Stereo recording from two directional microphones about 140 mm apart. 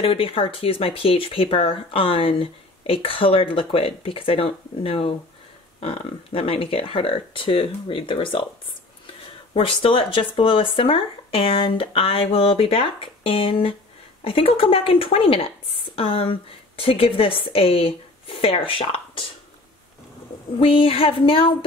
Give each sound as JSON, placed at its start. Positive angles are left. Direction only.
{"t": 0.0, "sound": "speech", "side_deg": 40}
{"t": 9.5, "sound": "speech", "side_deg": 40}
{"t": 20.5, "sound": "speech", "side_deg": 40}